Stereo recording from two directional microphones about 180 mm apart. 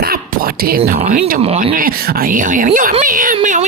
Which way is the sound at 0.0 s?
55° right (ahead or behind).